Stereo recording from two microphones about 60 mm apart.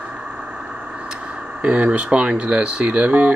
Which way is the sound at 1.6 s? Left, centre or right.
Centre.